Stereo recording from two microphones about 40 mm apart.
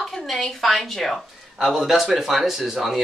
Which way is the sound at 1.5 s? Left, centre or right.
Centre.